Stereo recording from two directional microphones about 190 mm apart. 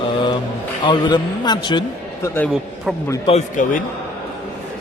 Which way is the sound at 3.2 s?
40° left (ahead or behind).